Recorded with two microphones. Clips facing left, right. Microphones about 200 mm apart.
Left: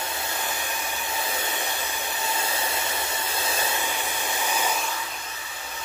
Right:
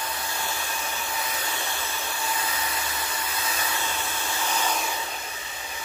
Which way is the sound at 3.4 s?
30° left (ahead or behind).